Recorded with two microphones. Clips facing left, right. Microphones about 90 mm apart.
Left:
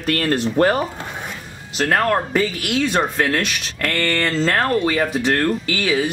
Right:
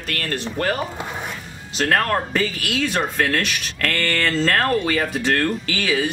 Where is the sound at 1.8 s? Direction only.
5° left (ahead or behind).